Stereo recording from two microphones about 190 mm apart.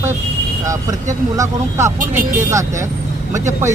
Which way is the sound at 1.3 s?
15° right (ahead or behind).